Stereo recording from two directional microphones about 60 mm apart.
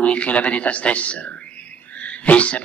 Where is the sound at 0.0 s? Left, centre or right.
Left.